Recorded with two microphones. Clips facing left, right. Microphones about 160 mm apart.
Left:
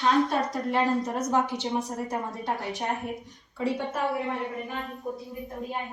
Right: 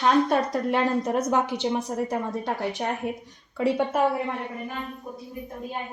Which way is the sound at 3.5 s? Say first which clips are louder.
Right 5 dB; 80° right.